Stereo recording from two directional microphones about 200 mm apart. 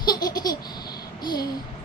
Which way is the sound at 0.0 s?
20° left (ahead or behind).